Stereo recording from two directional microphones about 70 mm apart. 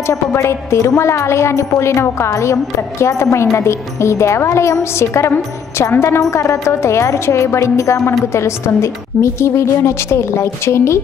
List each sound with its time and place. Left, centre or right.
0.0 s a woman's voice: left